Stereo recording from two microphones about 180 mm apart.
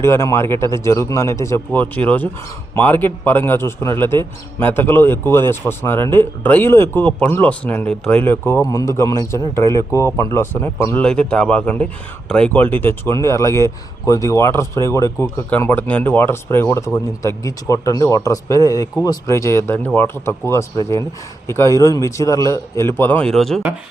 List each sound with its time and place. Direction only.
0.0 s a man's voice: 15° left (ahead or behind)